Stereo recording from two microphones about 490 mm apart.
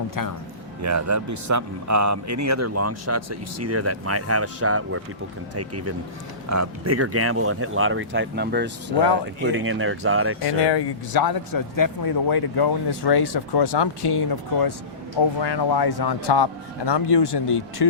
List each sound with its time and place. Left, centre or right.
0.2 s a man's voice: left
0.8 s a man's voice: right
10.4 s a man's voice: left